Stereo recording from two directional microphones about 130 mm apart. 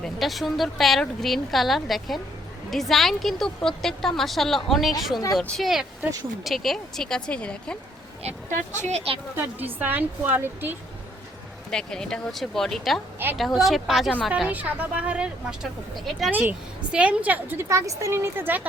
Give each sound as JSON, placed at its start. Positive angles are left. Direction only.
{"t": 0.0, "sound": "a woman's voice", "side_deg": 0}
{"t": 8.2, "sound": "a woman's voice", "side_deg": -60}
{"t": 9.3, "sound": "a woman's voice", "side_deg": -15}
{"t": 11.7, "sound": "a woman's voice", "side_deg": 5}
{"t": 16.3, "sound": "a woman's voice", "side_deg": -15}